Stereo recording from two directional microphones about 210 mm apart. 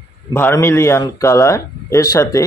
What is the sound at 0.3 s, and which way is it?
Speech, 10° left (ahead or behind).